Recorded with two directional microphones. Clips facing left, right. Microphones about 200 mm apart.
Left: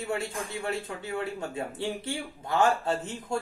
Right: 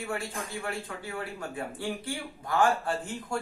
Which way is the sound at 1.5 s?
25° left (ahead or behind).